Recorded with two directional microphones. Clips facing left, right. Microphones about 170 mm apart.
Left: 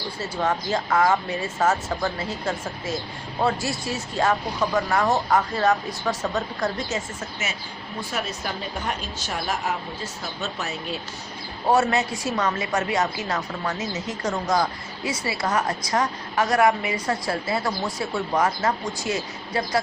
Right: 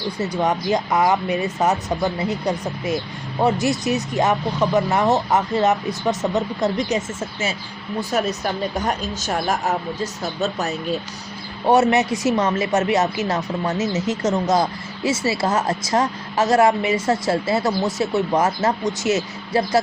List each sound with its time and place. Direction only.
0.2 s speech: 20° right (ahead or behind)
8.1 s a woman's voice: 40° right (ahead or behind)
11.7 s speech: 20° right (ahead or behind)